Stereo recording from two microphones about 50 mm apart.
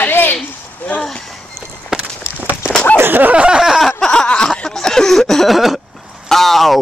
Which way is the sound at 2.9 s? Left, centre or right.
Right.